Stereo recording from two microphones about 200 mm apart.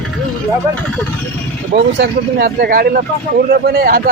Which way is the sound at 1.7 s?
50° right (ahead or behind).